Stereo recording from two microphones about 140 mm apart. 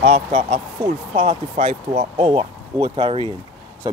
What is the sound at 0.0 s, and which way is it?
Speech, 55° right (ahead or behind).